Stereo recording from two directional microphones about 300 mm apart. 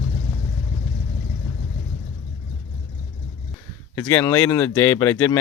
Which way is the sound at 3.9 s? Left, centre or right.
Centre.